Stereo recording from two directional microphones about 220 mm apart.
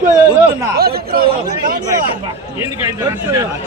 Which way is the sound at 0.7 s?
45° right (ahead or behind).